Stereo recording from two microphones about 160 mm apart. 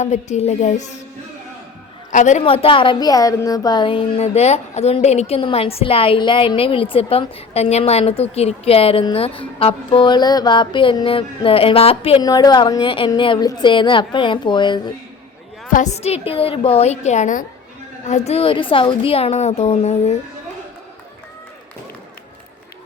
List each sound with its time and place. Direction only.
0.0 s a woman's voice: 45° left (ahead or behind)
2.1 s a woman's voice: 50° left (ahead or behind)
2.4 s a woman's voice: 35° left (ahead or behind)
12.2 s a woman's voice: 25° left (ahead or behind)
15.7 s a woman's voice: 45° left (ahead or behind)